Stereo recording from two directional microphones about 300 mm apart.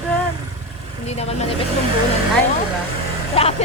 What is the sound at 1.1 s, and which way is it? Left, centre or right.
Speech, left.